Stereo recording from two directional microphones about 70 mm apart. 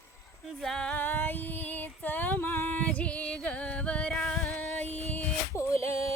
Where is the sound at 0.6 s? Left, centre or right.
Centre.